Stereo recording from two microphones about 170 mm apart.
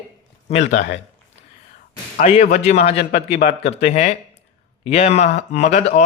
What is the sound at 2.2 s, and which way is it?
A man's voice, 35° left (ahead or behind).